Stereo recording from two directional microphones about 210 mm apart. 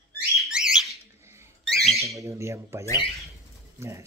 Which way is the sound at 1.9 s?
15° right (ahead or behind).